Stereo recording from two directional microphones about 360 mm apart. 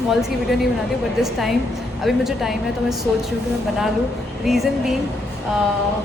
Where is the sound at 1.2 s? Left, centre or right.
Centre.